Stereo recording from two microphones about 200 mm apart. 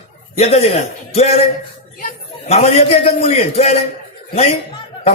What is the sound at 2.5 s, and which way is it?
A man's voice, 30° left (ahead or behind).